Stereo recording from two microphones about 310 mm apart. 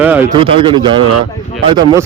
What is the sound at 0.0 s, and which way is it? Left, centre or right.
Speech, centre.